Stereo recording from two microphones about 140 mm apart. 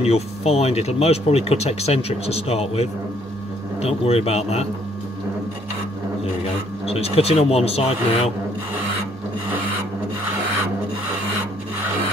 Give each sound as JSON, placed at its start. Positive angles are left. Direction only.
{"t": 0.0, "sound": "speech", "side_deg": 45}
{"t": 6.9, "sound": "speech", "side_deg": 45}